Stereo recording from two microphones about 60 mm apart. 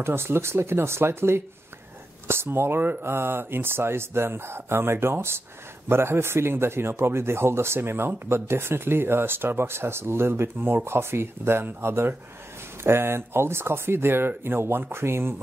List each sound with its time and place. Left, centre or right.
0.0 s speech: right